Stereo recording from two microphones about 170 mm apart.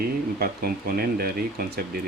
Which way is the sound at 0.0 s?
60° right (ahead or behind).